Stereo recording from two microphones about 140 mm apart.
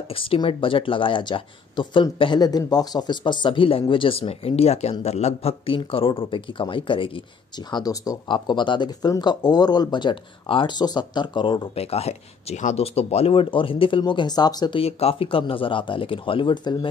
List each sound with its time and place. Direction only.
0.1 s a man's voice: 40° left (ahead or behind)
14.8 s speech: 45° left (ahead or behind)